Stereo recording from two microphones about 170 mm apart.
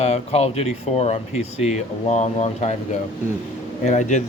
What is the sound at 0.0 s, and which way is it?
Speech, 35° left (ahead or behind).